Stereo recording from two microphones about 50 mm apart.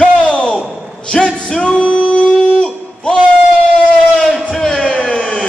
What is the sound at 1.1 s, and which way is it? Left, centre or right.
Music, centre.